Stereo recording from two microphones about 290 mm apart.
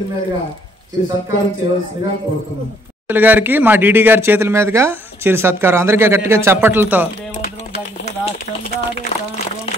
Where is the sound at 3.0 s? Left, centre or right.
Centre.